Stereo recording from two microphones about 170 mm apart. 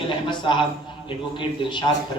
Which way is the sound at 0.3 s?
30° left (ahead or behind).